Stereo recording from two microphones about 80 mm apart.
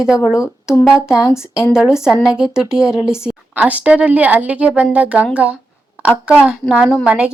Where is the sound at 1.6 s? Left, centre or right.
Centre.